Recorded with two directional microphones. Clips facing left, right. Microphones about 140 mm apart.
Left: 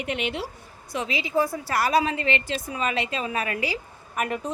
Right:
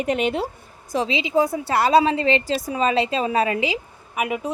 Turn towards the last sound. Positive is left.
turn(degrees=-5)  # may be behind; listen again after turning